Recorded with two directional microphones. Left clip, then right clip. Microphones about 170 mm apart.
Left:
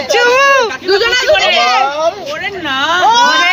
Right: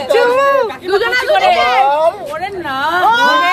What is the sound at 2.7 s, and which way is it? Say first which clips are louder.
Speech: left 2 dB; 90° right.